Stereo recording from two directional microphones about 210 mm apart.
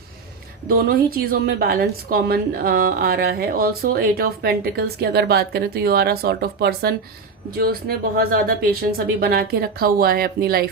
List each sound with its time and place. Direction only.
0.7 s a woman's voice: 45° right (ahead or behind)